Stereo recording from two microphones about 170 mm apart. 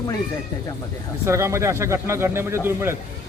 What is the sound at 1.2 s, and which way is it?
Speech, 15° right (ahead or behind).